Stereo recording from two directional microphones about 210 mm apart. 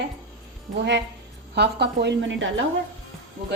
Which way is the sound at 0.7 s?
50° right (ahead or behind).